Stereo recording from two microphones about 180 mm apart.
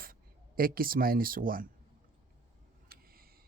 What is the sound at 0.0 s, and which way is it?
Speech, 55° right (ahead or behind).